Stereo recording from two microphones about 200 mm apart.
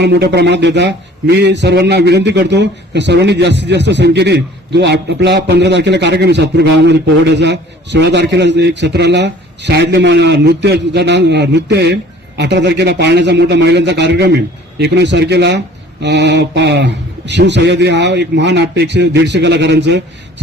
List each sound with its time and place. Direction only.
0.0 s a man's voice: 55° right (ahead or behind)